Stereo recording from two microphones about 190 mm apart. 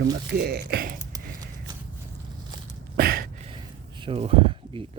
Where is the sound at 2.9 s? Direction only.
50° right (ahead or behind).